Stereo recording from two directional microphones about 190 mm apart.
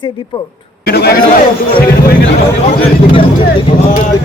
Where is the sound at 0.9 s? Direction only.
55° left (ahead or behind).